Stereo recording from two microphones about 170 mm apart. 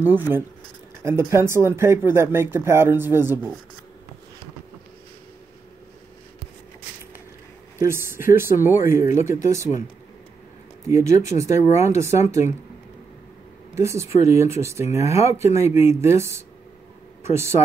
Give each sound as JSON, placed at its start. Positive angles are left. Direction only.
{"t": 0.0, "sound": "speech", "side_deg": -10}
{"t": 7.8, "sound": "speech", "side_deg": -15}
{"t": 10.9, "sound": "speech", "side_deg": -15}
{"t": 13.7, "sound": "speech", "side_deg": -15}
{"t": 17.2, "sound": "a sound", "side_deg": -15}